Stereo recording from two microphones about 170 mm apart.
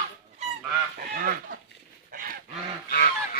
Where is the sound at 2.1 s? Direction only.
60° right (ahead or behind).